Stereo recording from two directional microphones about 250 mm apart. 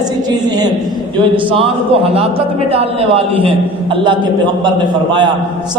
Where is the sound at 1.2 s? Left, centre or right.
Right.